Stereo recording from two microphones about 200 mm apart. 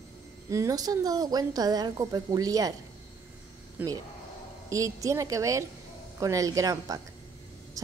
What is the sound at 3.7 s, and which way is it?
A woman's voice, 20° right (ahead or behind).